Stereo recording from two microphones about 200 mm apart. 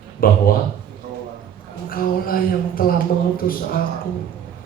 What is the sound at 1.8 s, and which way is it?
A man's voice, 45° left (ahead or behind).